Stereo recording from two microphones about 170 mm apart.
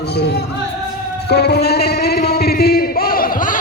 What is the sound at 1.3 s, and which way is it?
Music, 75° left (ahead or behind).